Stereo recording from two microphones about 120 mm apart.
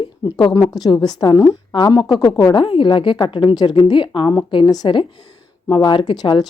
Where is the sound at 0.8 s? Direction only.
35° left (ahead or behind).